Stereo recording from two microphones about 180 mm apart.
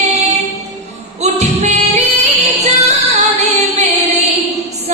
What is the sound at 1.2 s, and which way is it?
Music, 40° right (ahead or behind).